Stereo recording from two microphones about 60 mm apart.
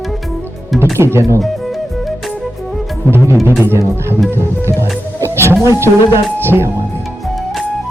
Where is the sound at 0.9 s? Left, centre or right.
Right.